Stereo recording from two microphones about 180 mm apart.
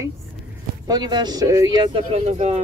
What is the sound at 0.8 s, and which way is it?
Speech, 25° right (ahead or behind).